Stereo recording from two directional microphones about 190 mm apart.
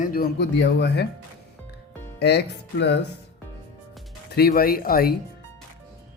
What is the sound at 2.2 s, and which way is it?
Speech, 60° left (ahead or behind).